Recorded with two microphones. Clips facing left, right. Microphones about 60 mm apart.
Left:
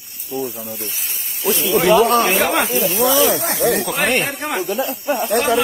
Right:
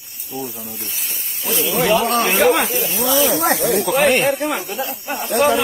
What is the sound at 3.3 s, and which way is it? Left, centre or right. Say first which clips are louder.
Speech: right 4 dB; right.